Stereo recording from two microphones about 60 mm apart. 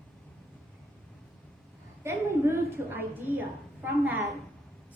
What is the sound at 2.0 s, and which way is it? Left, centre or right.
A woman's voice, right.